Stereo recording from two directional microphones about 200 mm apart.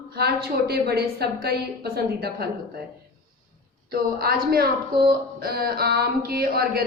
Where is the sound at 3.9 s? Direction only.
50° right (ahead or behind).